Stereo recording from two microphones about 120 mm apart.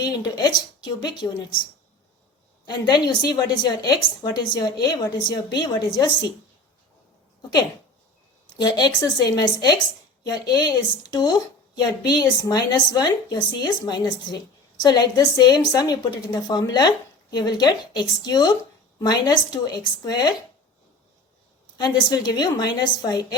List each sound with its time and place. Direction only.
0.0 s a woman's voice: 35° left (ahead or behind)
2.6 s a woman's voice: 35° left (ahead or behind)
8.6 s a woman's voice: 35° left (ahead or behind)
21.8 s a woman's voice: 35° left (ahead or behind)